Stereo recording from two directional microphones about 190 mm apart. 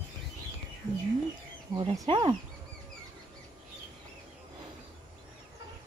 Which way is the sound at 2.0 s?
25° right (ahead or behind).